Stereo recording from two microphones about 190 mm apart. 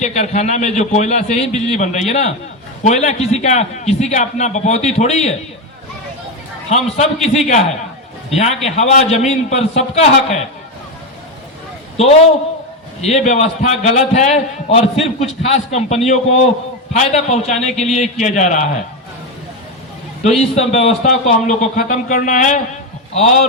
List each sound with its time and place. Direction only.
0.0 s a man's voice: 35° left (ahead or behind)
6.7 s a man's voice: 35° left (ahead or behind)
11.9 s a man's voice: 35° left (ahead or behind)
17.6 s speech: centre (ahead or behind)
17.9 s a man's voice: 40° left (ahead or behind)
20.4 s a man's voice: 35° left (ahead or behind)